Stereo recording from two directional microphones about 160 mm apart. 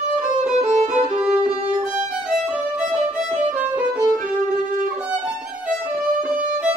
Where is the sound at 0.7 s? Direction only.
45° right (ahead or behind).